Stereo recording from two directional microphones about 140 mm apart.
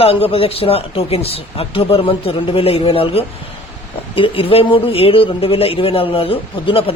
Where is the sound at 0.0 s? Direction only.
40° left (ahead or behind).